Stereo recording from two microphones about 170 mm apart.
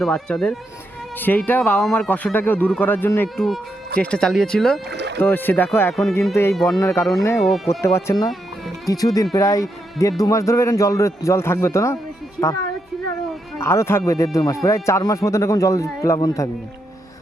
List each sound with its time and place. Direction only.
0.0 s speech: 5° left (ahead or behind)
3.3 s speech: centre (ahead or behind)
4.9 s speech: 90° right
5.2 s speech: 10° left (ahead or behind)
6.5 s speech: centre (ahead or behind)
6.7 s speech: 20° left (ahead or behind)
7.4 s speech: centre (ahead or behind)
7.7 s speech: 15° left (ahead or behind)
13.6 s speech: 15° left (ahead or behind)